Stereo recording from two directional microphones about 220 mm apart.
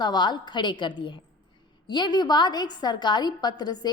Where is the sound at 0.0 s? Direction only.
20° left (ahead or behind).